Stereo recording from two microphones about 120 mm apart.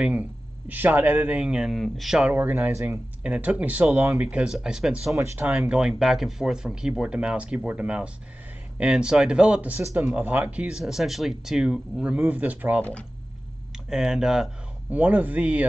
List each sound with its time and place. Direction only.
0.0 s speech: 10° right (ahead or behind)
4.2 s speech: 10° right (ahead or behind)
5.1 s speech: 20° right (ahead or behind)
5.5 s speech: 5° right (ahead or behind)
13.8 s speech: 5° right (ahead or behind)